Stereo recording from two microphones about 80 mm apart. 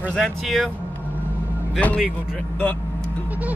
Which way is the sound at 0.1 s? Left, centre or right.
Centre.